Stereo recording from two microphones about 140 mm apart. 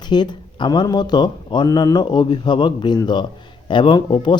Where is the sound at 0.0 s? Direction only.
30° left (ahead or behind).